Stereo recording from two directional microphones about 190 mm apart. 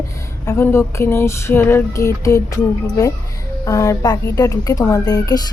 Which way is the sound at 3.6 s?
20° left (ahead or behind).